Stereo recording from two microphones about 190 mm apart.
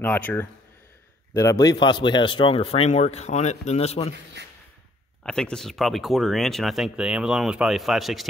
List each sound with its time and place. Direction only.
0.0 s speech: 10° left (ahead or behind); by 4.1 s 35° left (ahead or behind)
5.2 s speech: 5° left (ahead or behind)